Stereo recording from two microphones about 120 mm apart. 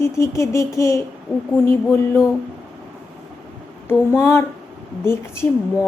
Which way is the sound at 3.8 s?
20° left (ahead or behind).